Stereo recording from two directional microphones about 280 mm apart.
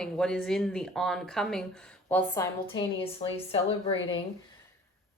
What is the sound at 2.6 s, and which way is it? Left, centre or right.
Speech, centre.